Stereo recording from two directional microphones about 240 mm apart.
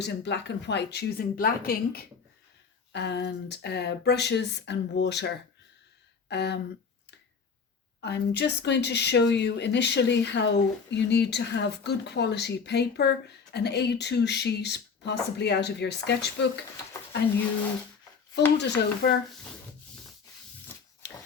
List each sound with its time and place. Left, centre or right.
0.0 s speech: left
8.0 s speech: left
18.5 s speech: left